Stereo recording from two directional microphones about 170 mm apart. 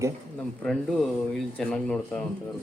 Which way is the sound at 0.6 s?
5° left (ahead or behind).